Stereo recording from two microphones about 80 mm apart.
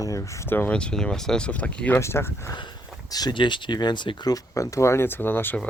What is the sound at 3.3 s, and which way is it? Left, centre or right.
Speech, left.